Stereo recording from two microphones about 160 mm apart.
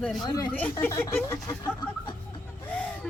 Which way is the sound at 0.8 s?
15° left (ahead or behind).